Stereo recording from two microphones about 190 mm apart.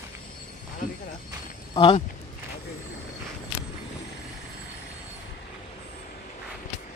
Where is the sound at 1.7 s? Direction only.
25° left (ahead or behind).